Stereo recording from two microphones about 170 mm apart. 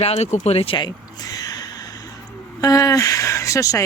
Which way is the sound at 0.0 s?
40° left (ahead or behind).